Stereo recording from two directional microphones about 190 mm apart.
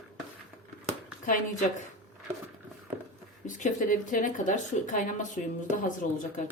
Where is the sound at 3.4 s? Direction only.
40° left (ahead or behind).